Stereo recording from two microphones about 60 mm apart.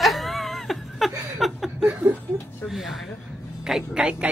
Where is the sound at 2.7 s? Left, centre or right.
Centre.